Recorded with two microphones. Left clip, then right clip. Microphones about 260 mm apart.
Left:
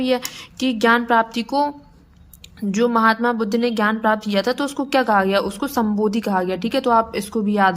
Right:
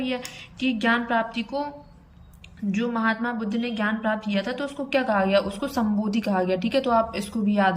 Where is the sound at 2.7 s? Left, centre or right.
Centre.